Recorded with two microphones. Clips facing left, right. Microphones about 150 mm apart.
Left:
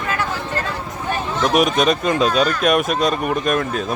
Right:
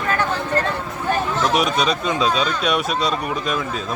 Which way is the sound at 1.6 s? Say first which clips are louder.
Left 3 dB; 50° left (ahead or behind).